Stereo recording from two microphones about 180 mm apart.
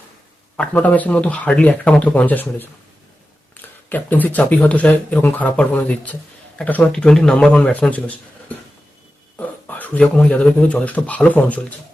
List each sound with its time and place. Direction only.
0.5 s speech: 5° left (ahead or behind)
3.8 s speech: 10° left (ahead or behind)